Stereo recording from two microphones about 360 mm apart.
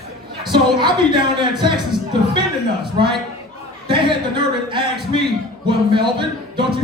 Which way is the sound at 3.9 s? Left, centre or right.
Centre.